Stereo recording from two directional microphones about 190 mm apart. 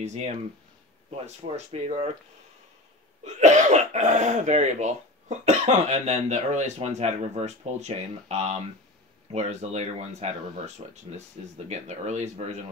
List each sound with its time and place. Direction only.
0.0 s speech: 35° right (ahead or behind)
3.3 s speech: 40° right (ahead or behind)